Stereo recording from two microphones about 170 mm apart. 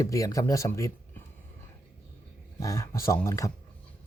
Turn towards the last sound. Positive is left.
turn(degrees=15)  # may be behind; listen again after turning